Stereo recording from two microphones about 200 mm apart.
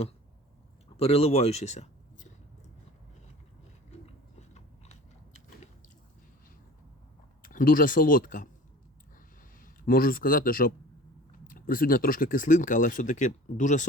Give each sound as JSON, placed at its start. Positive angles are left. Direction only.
{"t": 0.9, "sound": "speech", "side_deg": 30}
{"t": 7.4, "sound": "speech", "side_deg": 45}
{"t": 9.6, "sound": "a man's voice", "side_deg": 45}